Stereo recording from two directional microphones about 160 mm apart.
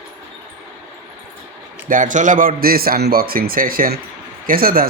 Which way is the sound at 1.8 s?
55° right (ahead or behind).